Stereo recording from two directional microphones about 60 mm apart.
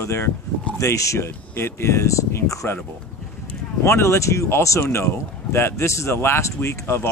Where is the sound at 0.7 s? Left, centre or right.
Left.